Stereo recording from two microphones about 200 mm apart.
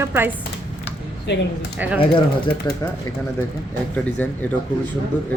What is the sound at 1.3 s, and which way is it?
Speech, 60° left (ahead or behind).